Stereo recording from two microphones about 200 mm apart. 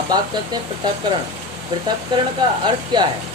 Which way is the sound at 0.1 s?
20° right (ahead or behind).